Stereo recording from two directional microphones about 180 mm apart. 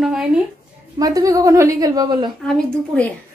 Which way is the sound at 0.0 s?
5° right (ahead or behind).